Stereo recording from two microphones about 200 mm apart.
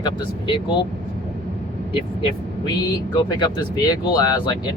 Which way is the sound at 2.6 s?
20° left (ahead or behind).